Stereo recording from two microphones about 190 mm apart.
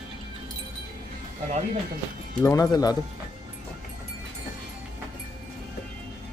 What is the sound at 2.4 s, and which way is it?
Speech, 15° left (ahead or behind).